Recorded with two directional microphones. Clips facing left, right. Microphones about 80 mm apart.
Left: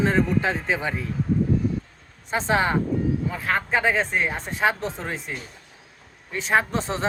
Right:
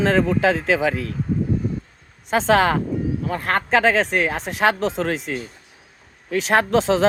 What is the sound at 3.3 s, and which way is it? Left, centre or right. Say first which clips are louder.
Speech: right 5 dB; right.